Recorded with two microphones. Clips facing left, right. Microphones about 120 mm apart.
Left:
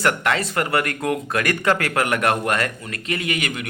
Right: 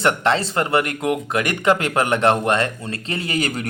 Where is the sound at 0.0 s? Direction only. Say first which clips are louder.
Right 2 dB; 25° right (ahead or behind).